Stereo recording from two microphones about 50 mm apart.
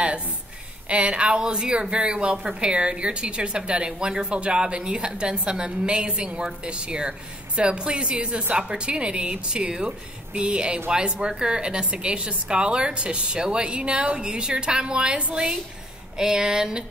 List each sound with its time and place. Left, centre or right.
0.8 s a woman's voice: right